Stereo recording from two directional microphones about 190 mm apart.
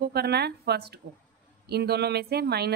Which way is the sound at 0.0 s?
60° right (ahead or behind).